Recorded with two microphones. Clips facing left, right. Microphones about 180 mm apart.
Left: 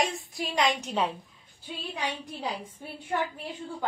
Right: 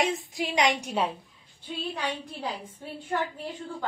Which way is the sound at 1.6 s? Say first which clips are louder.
Right 2 dB; 10° left (ahead or behind).